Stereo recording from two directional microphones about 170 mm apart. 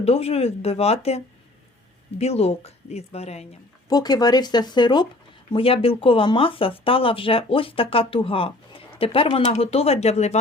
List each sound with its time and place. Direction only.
0.0 s speech: 35° left (ahead or behind)
3.8 s speech: 25° left (ahead or behind); by 10.4 s 40° left (ahead or behind)